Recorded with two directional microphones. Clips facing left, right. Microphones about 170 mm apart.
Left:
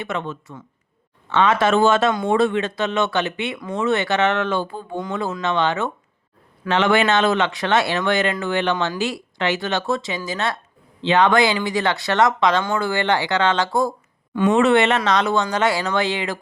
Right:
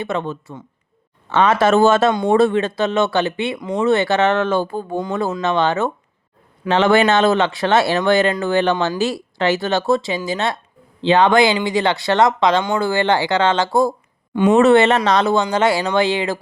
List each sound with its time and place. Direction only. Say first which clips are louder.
0.0 s speech: right 4 dB; 35° right (ahead or behind)
14.5 s speech: right 5 dB; 35° right (ahead or behind)